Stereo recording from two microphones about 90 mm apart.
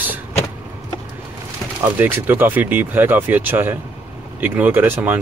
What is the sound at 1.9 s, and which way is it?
Speech, 20° right (ahead or behind).